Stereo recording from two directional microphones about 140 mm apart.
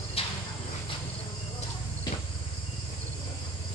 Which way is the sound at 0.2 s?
40° left (ahead or behind).